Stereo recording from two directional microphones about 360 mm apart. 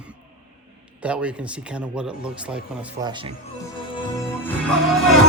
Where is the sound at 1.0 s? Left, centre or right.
Centre.